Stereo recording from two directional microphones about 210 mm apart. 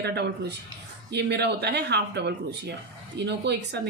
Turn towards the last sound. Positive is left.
turn(degrees=-55)  # may be behind; listen again after turning